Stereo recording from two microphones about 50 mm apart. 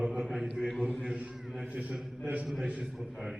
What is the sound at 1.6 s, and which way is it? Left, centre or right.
Mantra, right.